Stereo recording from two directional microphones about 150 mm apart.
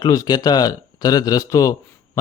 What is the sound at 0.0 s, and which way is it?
A man's voice, 25° left (ahead or behind).